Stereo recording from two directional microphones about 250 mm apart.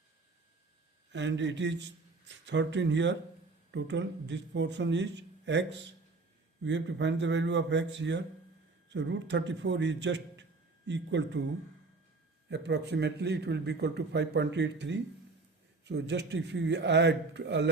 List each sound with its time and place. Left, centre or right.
1.1 s a man's voice: right
12.5 s a man's voice: right